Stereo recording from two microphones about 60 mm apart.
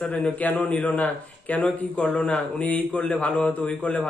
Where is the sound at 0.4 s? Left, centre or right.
Left.